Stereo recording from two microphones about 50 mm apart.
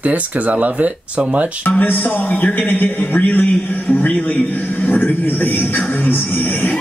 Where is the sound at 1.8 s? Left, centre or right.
Left.